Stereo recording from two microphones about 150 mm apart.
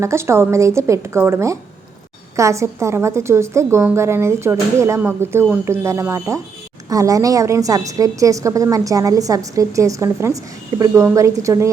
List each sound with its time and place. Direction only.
0.0 s a woman's voice: 20° right (ahead or behind)